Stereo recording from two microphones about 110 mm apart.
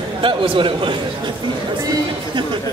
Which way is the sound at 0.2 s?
50° right (ahead or behind).